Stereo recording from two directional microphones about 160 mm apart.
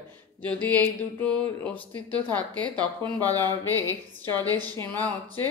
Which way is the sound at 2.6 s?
25° right (ahead or behind).